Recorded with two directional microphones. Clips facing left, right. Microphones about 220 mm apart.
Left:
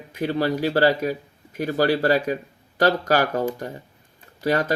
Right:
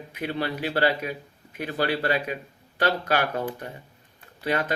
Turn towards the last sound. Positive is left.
turn(degrees=40)  # may be behind; listen again after turning